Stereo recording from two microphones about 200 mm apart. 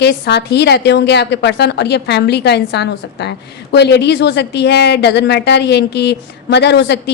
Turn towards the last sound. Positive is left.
turn(degrees=55)  # may be behind; listen again after turning